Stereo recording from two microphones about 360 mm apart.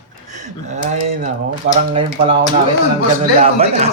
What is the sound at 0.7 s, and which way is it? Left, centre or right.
Speech, centre.